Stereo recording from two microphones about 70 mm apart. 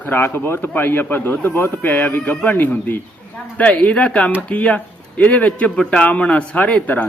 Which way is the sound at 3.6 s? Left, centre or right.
Centre.